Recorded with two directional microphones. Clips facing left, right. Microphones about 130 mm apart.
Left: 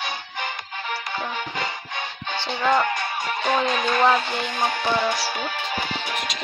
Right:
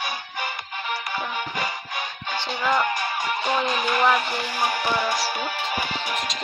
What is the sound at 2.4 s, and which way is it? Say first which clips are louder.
Speech: left 3 dB; 30° left (ahead or behind).